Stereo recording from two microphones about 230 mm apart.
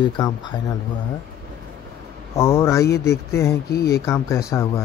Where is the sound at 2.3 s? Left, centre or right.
Centre.